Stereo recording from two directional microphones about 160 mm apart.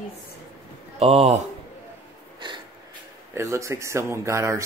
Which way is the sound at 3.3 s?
15° right (ahead or behind).